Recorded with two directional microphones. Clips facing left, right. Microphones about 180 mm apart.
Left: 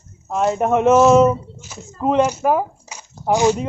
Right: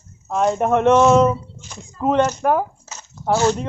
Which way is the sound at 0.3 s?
Centre (ahead or behind).